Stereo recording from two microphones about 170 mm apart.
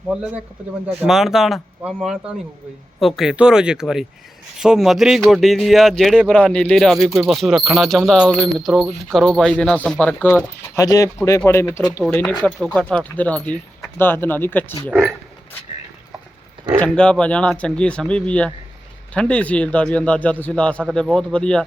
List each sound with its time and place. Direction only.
0.9 s a man's voice: 5° right (ahead or behind); by 11.9 s 15° left (ahead or behind)
12.5 s a man's voice: 5° left (ahead or behind)
16.8 s a man's voice: 5° left (ahead or behind)